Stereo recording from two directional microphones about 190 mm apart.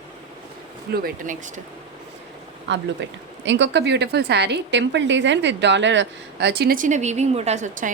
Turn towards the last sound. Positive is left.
turn(degrees=-40)  # may be behind; listen again after turning